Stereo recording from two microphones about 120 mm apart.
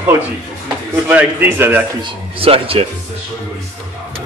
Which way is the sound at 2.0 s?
50° right (ahead or behind).